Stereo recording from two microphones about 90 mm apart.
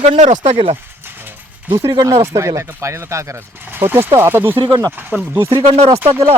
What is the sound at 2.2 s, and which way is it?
Speech, 35° right (ahead or behind).